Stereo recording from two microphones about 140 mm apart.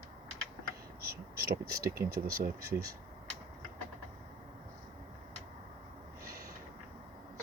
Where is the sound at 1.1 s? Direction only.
90° right.